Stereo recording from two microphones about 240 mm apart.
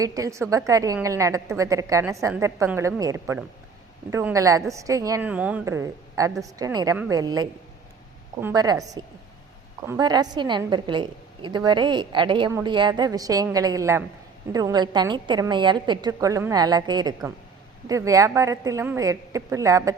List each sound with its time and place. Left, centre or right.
0.0 s a woman's voice: centre